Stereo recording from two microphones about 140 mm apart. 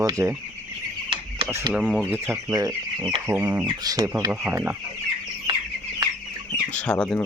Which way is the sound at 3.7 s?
25° right (ahead or behind).